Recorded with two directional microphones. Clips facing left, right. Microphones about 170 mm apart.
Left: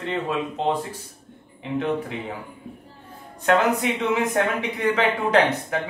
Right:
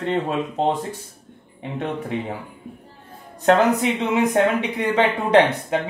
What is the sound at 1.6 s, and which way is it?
Speech, 30° right (ahead or behind).